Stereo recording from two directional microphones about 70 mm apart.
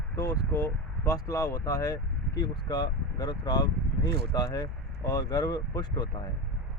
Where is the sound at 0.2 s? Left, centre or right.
Left.